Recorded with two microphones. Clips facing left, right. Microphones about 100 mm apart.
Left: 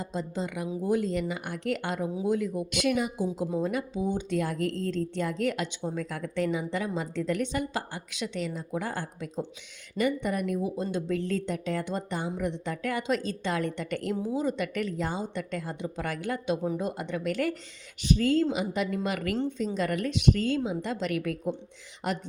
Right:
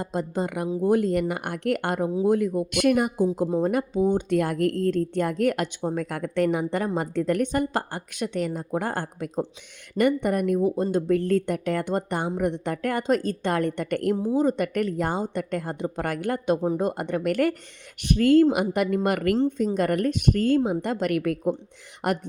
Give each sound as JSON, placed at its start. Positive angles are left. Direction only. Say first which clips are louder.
{"t": 0.0, "sound": "speech", "louder": "right 5 dB", "side_deg": -55}